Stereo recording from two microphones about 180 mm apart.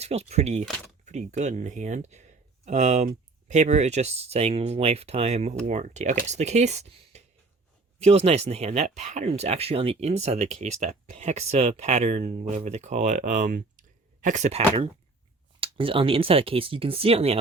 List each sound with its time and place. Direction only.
0.0 s speech: 35° right (ahead or behind)